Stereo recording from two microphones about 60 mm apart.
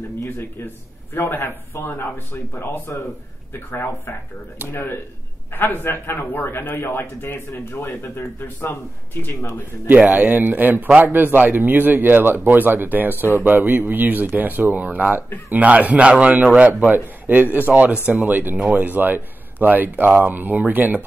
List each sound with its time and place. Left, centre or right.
1.1 s speech: left
10.0 s a man's voice: right